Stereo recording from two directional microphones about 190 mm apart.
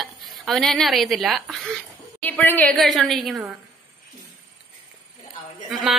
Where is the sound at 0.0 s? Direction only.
Centre (ahead or behind).